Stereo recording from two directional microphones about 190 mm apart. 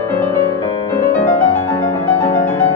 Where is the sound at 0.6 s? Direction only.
25° left (ahead or behind).